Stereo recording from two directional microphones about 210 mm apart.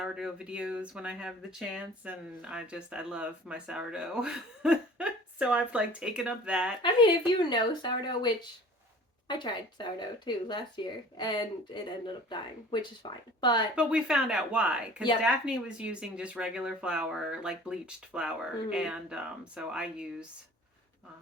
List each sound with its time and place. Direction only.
0.0 s speech: 5° right (ahead or behind)
6.8 s speech: 25° left (ahead or behind)
13.7 s speech: 5° right (ahead or behind)